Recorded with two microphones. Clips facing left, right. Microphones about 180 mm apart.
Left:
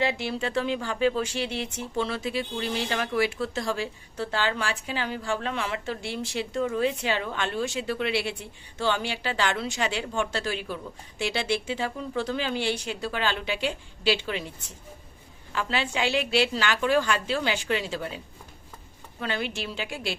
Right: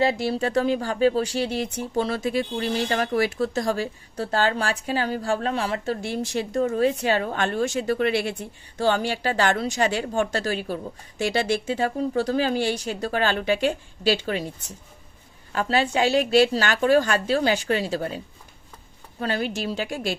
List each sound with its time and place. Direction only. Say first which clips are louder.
0.0 s speech: right 5 dB; 40° right (ahead or behind)
15.5 s speech: right 6 dB; 40° right (ahead or behind)
19.2 s speech: right 5 dB; 40° right (ahead or behind)